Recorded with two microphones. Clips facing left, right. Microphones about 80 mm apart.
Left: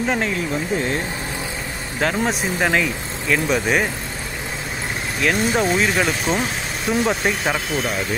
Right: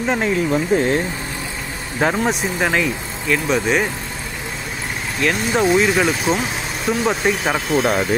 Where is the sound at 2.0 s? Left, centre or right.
Centre.